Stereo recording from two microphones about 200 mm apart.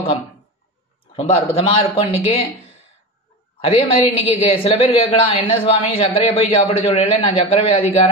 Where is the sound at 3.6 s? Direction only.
30° left (ahead or behind).